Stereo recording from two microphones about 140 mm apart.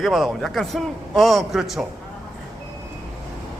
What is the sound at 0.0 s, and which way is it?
A man's voice, centre (ahead or behind).